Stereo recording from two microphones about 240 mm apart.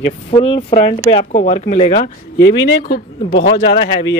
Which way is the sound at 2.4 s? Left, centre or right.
Left.